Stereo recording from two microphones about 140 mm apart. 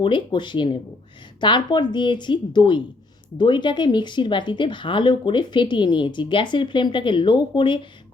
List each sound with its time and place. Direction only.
0.0 s speech: 35° left (ahead or behind)